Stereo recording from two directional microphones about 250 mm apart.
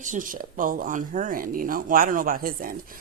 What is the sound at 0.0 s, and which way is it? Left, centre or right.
A woman's voice, right.